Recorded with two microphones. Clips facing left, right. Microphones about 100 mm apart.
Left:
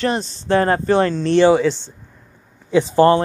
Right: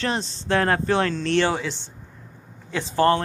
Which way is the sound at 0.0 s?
5° left (ahead or behind).